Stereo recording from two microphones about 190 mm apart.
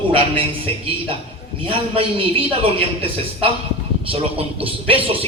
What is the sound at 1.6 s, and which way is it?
Speech, 30° right (ahead or behind).